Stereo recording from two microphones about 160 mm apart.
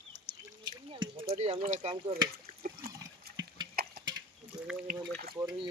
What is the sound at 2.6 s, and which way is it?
Water, 65° right (ahead or behind).